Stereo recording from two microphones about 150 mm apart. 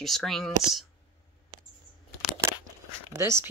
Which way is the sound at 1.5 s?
30° right (ahead or behind).